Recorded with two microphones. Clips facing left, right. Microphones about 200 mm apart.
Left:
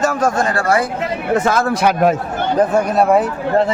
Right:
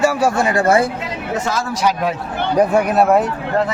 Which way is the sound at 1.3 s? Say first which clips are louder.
Left 6 dB; 55° left (ahead or behind).